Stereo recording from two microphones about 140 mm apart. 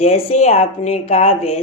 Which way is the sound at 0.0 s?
50° left (ahead or behind).